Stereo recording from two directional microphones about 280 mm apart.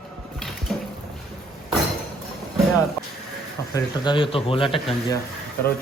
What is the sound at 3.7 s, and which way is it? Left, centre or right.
A man's voice, centre.